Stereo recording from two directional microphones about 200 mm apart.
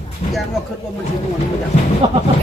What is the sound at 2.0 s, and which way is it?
Speech, 25° right (ahead or behind).